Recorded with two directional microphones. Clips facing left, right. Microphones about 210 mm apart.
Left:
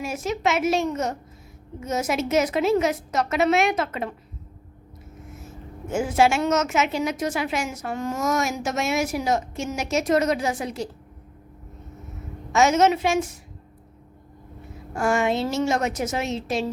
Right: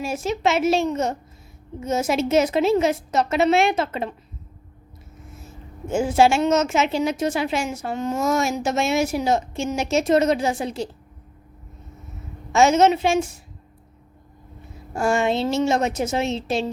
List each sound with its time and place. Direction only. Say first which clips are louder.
0.0 s a woman's voice: right 2 dB; 30° right (ahead or behind)
5.9 s a woman's voice: right 3 dB; 30° right (ahead or behind)
12.5 s a woman's voice: right 2 dB; 30° right (ahead or behind)
14.9 s a woman's voice: right 1 dB; 25° right (ahead or behind)